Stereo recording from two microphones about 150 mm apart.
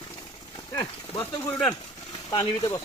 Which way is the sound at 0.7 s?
30° left (ahead or behind).